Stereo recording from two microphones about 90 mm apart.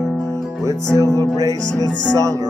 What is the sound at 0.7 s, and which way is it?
Music, 35° right (ahead or behind).